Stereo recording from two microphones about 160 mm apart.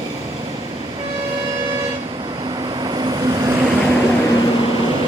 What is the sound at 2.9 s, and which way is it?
Vehicle, 30° right (ahead or behind).